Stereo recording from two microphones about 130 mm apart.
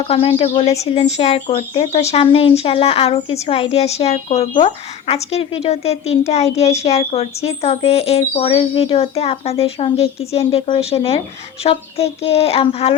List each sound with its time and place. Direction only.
0.1 s a woman's voice: 45° left (ahead or behind)
2.2 s a woman's voice: 45° left (ahead or behind)